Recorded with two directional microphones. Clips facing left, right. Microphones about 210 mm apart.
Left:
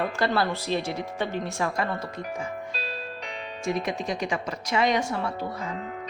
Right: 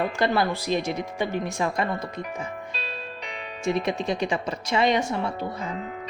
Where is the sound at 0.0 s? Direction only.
15° right (ahead or behind).